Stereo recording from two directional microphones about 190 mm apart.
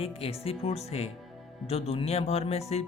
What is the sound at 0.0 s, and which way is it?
Speech, 30° left (ahead or behind).